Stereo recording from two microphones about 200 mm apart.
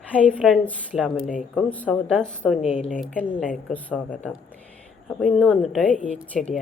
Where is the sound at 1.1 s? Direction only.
35° left (ahead or behind).